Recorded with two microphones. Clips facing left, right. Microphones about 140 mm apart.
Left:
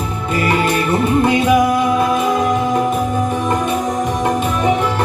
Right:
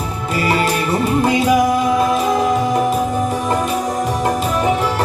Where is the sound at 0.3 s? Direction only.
10° right (ahead or behind).